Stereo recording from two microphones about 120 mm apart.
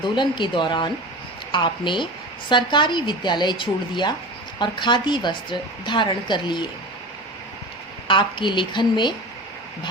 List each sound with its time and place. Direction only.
0.0 s a woman's voice: 40° left (ahead or behind)
8.0 s a woman's voice: 40° left (ahead or behind)